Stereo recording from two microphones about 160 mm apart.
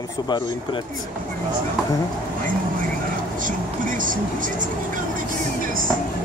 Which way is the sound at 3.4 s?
55° right (ahead or behind).